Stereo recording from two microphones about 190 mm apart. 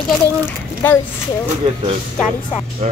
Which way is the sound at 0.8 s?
10° left (ahead or behind).